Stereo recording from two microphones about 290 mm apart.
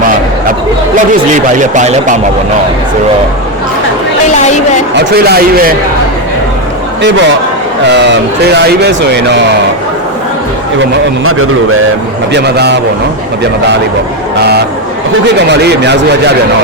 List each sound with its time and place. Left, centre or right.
1.5 s speech: right
4.9 s speech: right
7.9 s speech: right
11.2 s a man's voice: right
12.3 s speech: right
15.4 s speech: right